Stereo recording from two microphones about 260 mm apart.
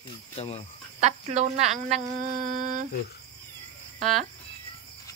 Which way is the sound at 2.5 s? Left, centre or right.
Right.